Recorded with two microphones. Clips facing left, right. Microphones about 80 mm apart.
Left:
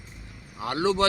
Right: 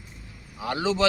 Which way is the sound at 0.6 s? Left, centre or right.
Left.